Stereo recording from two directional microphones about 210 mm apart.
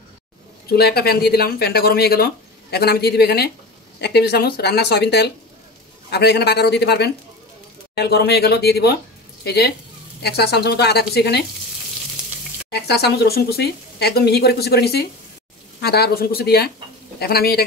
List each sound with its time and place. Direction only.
0.7 s speech: 50° left (ahead or behind)
12.7 s speech: 50° left (ahead or behind)